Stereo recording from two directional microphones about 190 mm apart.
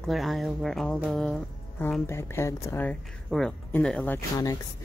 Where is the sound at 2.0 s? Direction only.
15° left (ahead or behind).